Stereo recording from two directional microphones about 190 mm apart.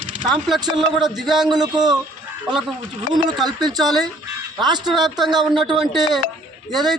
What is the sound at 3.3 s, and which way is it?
Speech, centre (ahead or behind).